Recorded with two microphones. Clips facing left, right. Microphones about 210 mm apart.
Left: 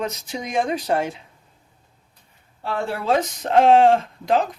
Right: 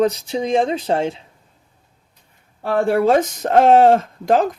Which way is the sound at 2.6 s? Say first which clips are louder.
Right 8 dB; 55° right (ahead or behind).